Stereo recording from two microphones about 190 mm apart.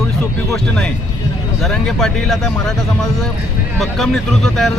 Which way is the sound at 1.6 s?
Centre (ahead or behind).